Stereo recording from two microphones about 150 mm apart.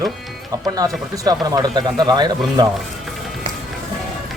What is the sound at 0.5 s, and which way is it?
Speech, 25° right (ahead or behind).